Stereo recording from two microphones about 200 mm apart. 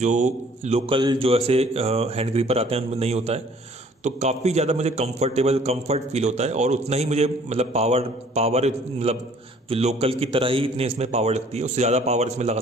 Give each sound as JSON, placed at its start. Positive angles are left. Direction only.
{"t": 0.0, "sound": "a man's voice", "side_deg": -35}